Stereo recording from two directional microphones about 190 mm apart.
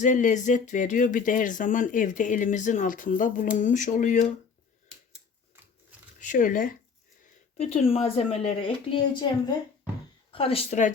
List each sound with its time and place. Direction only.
0.0 s speech: 40° left (ahead or behind)
6.1 s speech: 40° left (ahead or behind)
7.6 s speech: 35° left (ahead or behind)